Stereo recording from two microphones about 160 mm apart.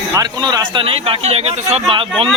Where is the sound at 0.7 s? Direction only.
35° right (ahead or behind).